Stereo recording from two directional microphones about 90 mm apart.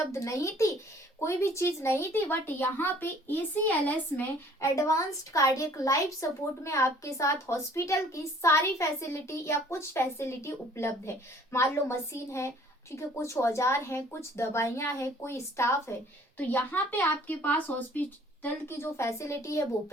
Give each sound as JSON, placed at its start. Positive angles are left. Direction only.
{"t": 0.1, "sound": "a woman's voice", "side_deg": 35}
{"t": 4.7, "sound": "a woman's voice", "side_deg": 35}
{"t": 18.4, "sound": "a woman's voice", "side_deg": 30}